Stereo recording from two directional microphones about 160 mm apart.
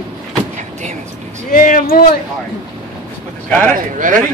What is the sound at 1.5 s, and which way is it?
Speech, 55° left (ahead or behind).